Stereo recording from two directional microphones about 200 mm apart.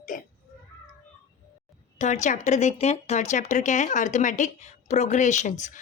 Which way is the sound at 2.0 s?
35° left (ahead or behind).